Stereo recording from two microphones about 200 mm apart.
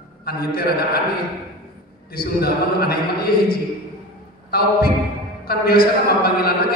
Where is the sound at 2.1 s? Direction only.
50° left (ahead or behind).